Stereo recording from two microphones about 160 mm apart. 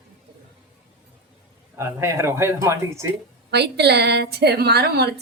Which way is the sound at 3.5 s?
90° right.